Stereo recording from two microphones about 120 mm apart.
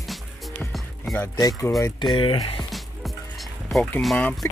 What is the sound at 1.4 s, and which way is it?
Speech, 30° left (ahead or behind).